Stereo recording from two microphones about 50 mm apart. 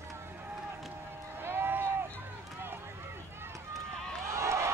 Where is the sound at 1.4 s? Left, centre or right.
Right.